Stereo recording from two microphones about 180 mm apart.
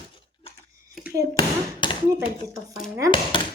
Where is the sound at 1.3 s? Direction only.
25° left (ahead or behind).